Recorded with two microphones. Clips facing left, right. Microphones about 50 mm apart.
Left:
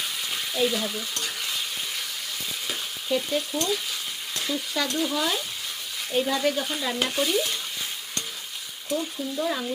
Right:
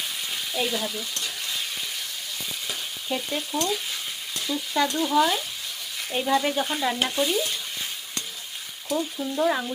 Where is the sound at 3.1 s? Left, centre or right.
Centre.